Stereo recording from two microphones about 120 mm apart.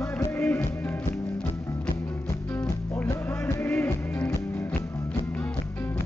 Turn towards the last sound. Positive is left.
turn(degrees=15)  # may be behind; listen again after turning